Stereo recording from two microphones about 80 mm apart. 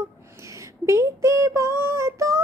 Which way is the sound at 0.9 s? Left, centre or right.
Right.